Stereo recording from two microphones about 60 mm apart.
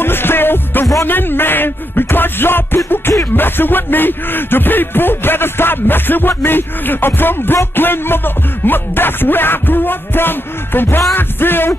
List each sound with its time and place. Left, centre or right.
0.0 s music: left